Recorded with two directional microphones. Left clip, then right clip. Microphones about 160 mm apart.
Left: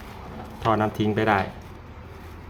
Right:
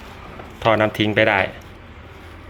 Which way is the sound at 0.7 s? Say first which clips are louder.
Right 7 dB; 15° right (ahead or behind).